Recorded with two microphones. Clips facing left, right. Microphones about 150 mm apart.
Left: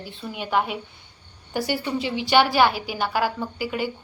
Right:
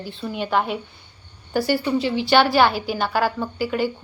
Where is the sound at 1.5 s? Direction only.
20° left (ahead or behind).